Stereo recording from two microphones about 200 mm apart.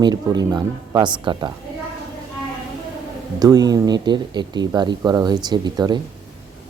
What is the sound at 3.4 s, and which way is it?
Speech, 20° right (ahead or behind).